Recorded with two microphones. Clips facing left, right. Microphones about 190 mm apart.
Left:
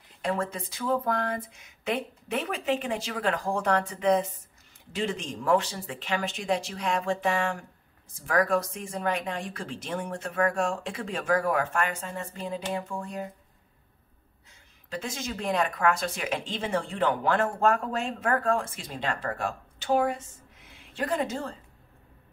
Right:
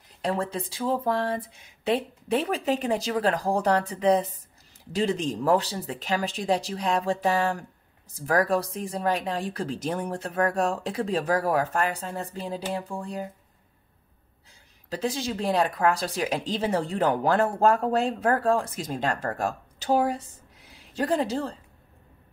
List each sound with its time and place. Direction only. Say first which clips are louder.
0.2 s speech: right 2 dB; 35° right (ahead or behind)
14.9 s speech: right 6 dB; 35° right (ahead or behind)